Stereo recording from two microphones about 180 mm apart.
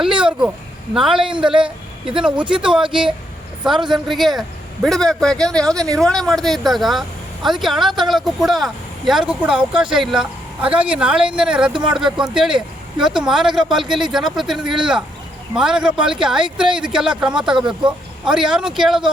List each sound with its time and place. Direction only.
0.0 s speech: 5° right (ahead or behind)